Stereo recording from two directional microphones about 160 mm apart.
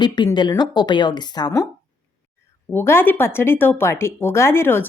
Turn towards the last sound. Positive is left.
turn(degrees=15)  # may be behind; listen again after turning